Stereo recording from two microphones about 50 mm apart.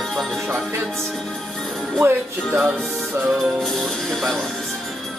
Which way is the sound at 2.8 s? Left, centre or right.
Centre.